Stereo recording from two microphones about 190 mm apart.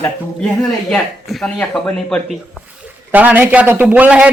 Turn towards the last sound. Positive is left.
turn(degrees=-5)  # may be behind; listen again after turning